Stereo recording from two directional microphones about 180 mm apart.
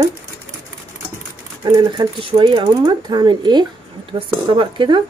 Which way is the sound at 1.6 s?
25° right (ahead or behind).